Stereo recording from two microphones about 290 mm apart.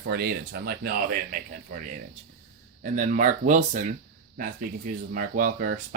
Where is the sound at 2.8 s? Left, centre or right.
Right.